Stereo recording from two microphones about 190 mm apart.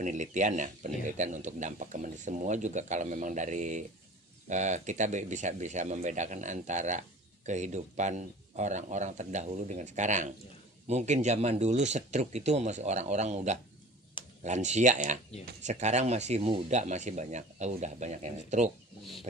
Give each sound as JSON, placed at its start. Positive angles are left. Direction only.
{"t": 0.0, "sound": "a man's voice", "side_deg": -40}